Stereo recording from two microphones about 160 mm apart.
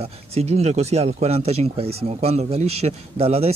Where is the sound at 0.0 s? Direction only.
40° right (ahead or behind).